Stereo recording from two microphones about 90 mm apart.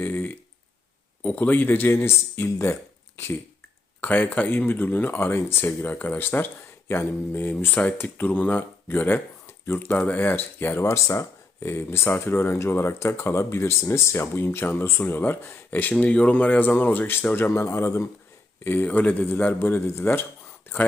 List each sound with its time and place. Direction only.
0.0 s a sound: 20° left (ahead or behind)
1.2 s speech: 20° left (ahead or behind)
4.0 s speech: 20° left (ahead or behind)